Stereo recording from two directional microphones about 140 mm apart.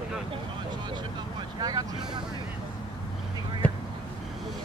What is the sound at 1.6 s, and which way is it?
Vehicle, 30° right (ahead or behind).